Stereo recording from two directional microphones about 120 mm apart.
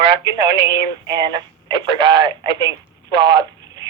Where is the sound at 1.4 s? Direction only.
35° right (ahead or behind).